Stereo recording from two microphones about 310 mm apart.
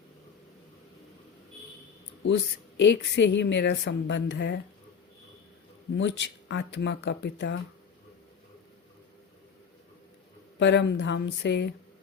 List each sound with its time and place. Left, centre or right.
2.2 s a woman's voice: left
6.0 s a woman's voice: left
10.6 s a woman's voice: left